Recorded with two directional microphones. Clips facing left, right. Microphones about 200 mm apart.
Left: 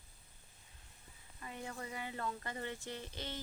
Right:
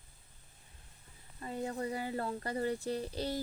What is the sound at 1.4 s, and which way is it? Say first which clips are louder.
Speech: right 9 dB; 35° right (ahead or behind).